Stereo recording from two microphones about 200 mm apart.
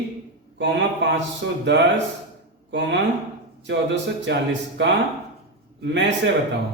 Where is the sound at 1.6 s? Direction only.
60° right (ahead or behind).